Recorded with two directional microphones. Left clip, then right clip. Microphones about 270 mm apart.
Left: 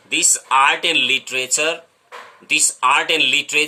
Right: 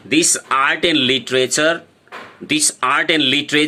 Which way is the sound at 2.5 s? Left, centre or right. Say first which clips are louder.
Left 1 dB; right.